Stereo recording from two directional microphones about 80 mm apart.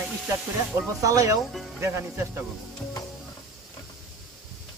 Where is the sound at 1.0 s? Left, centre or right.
Right.